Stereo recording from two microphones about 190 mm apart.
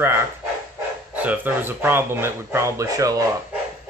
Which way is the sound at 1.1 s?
10° right (ahead or behind).